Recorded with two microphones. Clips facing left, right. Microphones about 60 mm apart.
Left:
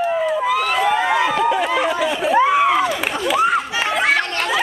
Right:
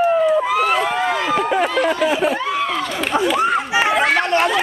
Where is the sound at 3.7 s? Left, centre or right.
Centre.